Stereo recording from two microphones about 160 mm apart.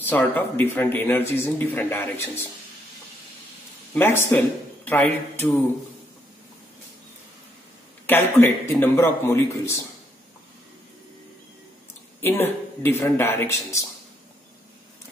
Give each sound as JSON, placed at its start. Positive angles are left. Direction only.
{"t": 0.1, "sound": "speech", "side_deg": 10}
{"t": 3.9, "sound": "speech", "side_deg": 15}
{"t": 8.1, "sound": "speech", "side_deg": 15}
{"t": 12.2, "sound": "speech", "side_deg": 15}